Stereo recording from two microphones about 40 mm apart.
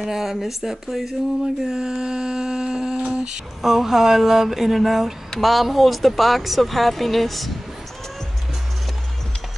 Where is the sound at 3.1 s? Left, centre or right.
Right.